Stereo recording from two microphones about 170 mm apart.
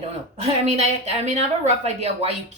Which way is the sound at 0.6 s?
40° right (ahead or behind).